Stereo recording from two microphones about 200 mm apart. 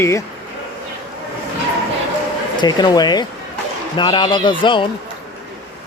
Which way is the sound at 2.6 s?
20° left (ahead or behind).